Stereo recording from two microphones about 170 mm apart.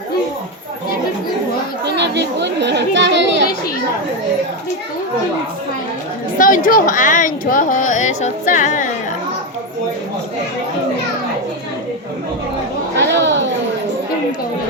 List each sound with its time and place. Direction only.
1.8 s children playing: 90° right
6.4 s speech: 55° left (ahead or behind)
13.1 s a sound: 90° right